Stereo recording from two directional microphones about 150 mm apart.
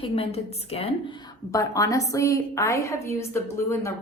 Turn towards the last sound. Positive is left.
turn(degrees=15)  # may be behind; listen again after turning